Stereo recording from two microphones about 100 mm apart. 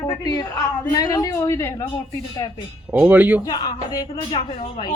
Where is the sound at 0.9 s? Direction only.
40° left (ahead or behind).